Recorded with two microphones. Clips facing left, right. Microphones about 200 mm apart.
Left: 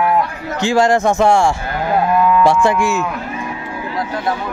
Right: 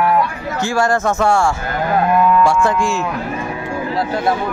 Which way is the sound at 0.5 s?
15° left (ahead or behind).